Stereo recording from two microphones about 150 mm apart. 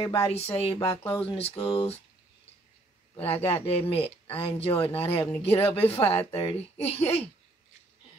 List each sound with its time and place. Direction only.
0.0 s speech: 40° left (ahead or behind)
3.4 s speech: 40° left (ahead or behind)